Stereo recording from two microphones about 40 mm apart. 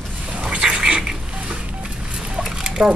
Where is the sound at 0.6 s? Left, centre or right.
Right.